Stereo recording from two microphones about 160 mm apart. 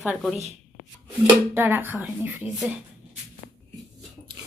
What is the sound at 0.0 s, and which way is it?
Speech, centre (ahead or behind).